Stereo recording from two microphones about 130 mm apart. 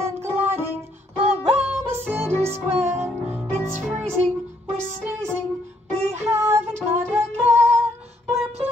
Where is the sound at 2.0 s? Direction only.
20° right (ahead or behind).